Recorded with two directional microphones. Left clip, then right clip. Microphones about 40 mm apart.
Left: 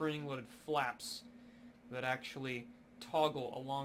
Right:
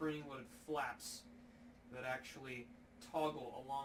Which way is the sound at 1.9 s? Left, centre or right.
Right.